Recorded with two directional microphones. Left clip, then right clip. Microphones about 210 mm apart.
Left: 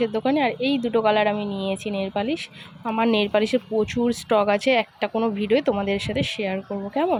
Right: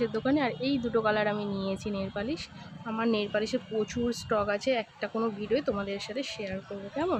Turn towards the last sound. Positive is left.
turn(degrees=20)  # may be behind; listen again after turning